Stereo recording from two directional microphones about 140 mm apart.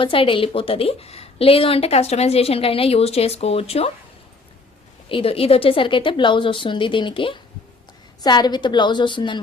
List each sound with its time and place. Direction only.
0.0 s a woman's voice: 40° left (ahead or behind)
5.0 s a woman's voice: 40° left (ahead or behind)